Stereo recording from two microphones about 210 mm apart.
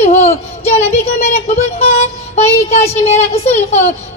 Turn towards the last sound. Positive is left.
turn(degrees=30)  # may be behind; listen again after turning